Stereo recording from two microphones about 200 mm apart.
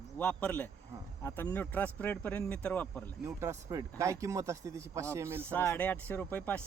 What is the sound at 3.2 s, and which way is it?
Speech, 15° right (ahead or behind).